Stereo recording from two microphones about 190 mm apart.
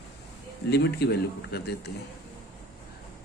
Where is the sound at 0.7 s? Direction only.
60° left (ahead or behind).